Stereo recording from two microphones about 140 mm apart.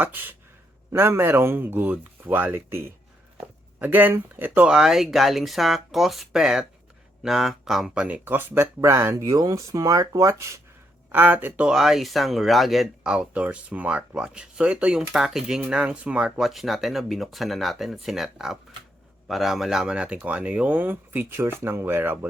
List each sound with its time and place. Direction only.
0.0 s speech: 15° right (ahead or behind)